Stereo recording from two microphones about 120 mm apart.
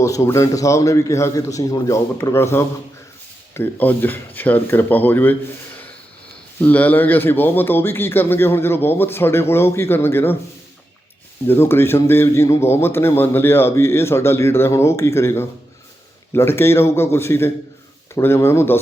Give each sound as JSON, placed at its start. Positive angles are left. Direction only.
{"t": 0.0, "sound": "a man's voice", "side_deg": 25}
{"t": 11.4, "sound": "a man's voice", "side_deg": 20}